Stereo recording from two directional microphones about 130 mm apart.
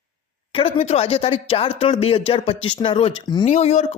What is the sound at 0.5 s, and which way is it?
Speech, 45° left (ahead or behind).